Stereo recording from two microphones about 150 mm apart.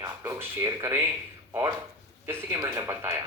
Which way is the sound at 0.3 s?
20° right (ahead or behind).